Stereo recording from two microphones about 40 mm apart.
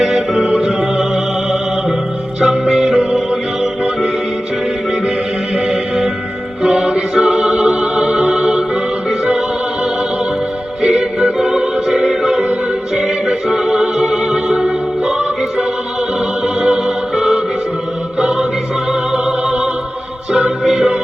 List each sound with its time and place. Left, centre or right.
0.0 s music: right
2.4 s music: centre
5.6 s music: centre
10.8 s music: right